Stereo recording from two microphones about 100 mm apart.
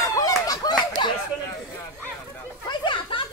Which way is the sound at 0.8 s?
50° left (ahead or behind).